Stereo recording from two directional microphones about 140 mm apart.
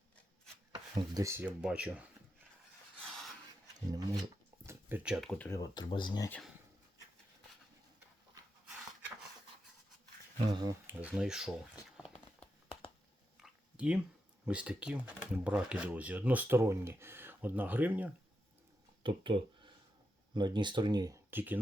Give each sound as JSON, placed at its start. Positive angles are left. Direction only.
{"t": 0.7, "sound": "speech", "side_deg": -30}
{"t": 3.0, "sound": "filing", "side_deg": 0}
{"t": 3.8, "sound": "speech", "side_deg": -25}
{"t": 4.6, "sound": "a sound", "side_deg": -15}
{"t": 5.5, "sound": "speech", "side_deg": 25}
{"t": 8.6, "sound": "pant", "side_deg": -10}
{"t": 10.3, "sound": "speech", "side_deg": -35}
{"t": 10.8, "sound": "speech", "side_deg": -5}
{"t": 13.3, "sound": "a sound", "side_deg": -5}
{"t": 14.4, "sound": "speech", "side_deg": -10}
{"t": 19.0, "sound": "speech", "side_deg": -35}
{"t": 21.2, "sound": "speech", "side_deg": -15}